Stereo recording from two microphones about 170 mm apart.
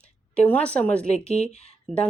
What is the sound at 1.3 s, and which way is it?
Speech, 40° left (ahead or behind).